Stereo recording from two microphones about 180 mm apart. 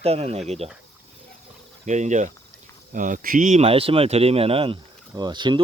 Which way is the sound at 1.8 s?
40° right (ahead or behind).